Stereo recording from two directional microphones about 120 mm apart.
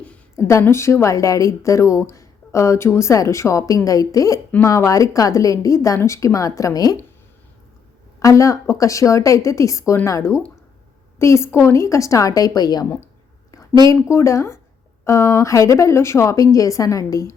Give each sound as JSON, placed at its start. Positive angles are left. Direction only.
{"t": 0.3, "sound": "a woman's voice", "side_deg": 25}
{"t": 8.2, "sound": "a woman's voice", "side_deg": 25}